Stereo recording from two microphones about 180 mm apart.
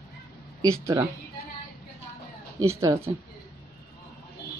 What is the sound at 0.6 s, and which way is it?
Speech, 20° right (ahead or behind).